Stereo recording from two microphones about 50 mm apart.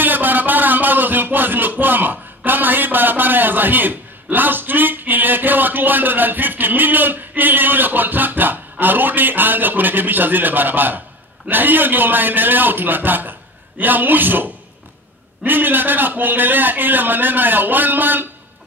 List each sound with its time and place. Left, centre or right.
0.0 s music: right
11.4 s a man's voice: right